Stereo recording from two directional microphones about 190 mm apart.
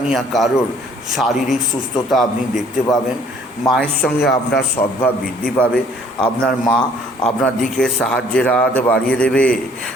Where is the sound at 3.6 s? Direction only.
5° left (ahead or behind).